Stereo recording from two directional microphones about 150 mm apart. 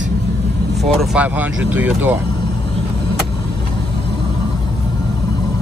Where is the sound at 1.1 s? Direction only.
10° right (ahead or behind).